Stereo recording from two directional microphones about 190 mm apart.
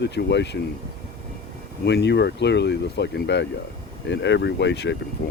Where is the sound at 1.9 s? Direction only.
65° left (ahead or behind).